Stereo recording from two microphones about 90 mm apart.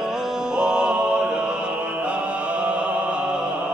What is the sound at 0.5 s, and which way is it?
Music, 10° right (ahead or behind).